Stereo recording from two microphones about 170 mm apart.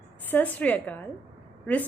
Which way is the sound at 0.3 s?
10° left (ahead or behind).